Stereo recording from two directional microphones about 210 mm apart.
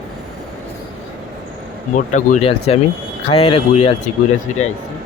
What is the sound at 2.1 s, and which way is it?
Speech, 35° left (ahead or behind).